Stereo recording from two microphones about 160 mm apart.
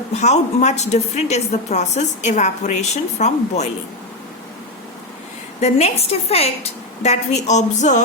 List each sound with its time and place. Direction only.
0.1 s a woman's voice: 45° left (ahead or behind)
5.5 s a woman's voice: 45° left (ahead or behind)